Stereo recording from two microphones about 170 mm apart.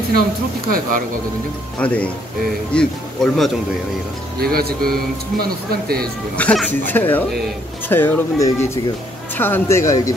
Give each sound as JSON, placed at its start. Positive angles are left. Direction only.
{"t": 0.7, "sound": "speech", "side_deg": -55}
{"t": 1.8, "sound": "speech", "side_deg": 10}
{"t": 4.4, "sound": "speech", "side_deg": -65}
{"t": 6.3, "sound": "speech", "side_deg": 10}